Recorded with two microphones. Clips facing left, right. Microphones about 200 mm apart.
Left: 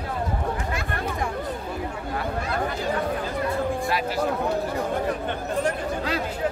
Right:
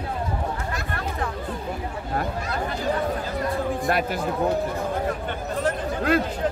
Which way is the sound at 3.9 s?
55° right (ahead or behind).